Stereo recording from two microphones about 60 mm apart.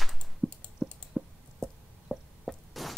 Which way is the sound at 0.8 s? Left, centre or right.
Centre.